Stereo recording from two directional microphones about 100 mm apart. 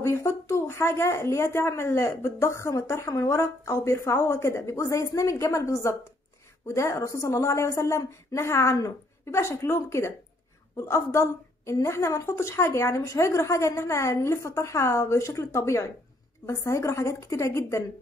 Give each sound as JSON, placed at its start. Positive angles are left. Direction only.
{"t": 0.0, "sound": "speech", "side_deg": 30}